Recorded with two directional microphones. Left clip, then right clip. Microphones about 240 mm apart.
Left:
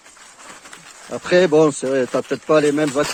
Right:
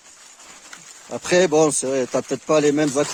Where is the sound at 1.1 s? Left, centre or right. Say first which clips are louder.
Left 3 dB; centre.